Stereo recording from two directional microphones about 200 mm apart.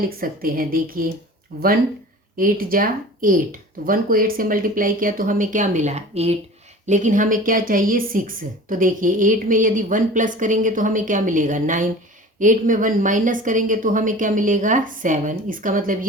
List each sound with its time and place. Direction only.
0.2 s a woman's voice: 45° right (ahead or behind)